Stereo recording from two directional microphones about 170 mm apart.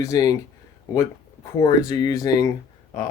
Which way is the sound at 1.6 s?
25° left (ahead or behind).